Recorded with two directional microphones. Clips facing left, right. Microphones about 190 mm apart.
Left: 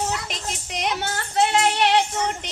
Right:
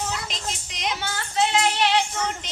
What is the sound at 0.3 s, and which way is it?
Music, 60° left (ahead or behind).